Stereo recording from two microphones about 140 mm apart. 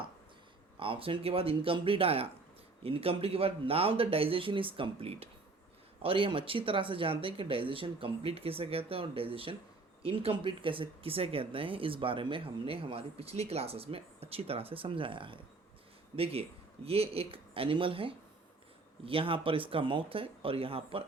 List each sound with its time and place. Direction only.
0.8 s speech: 40° right (ahead or behind)